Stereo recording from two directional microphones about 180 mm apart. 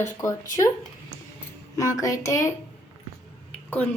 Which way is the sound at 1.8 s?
15° left (ahead or behind).